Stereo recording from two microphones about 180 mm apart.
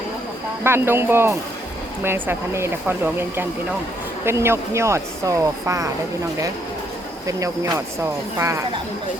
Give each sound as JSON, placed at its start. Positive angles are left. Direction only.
{"t": 0.6, "sound": "speech", "side_deg": -15}
{"t": 7.3, "sound": "speech", "side_deg": -20}